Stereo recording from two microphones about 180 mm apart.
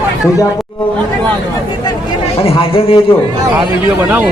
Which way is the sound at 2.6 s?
30° left (ahead or behind).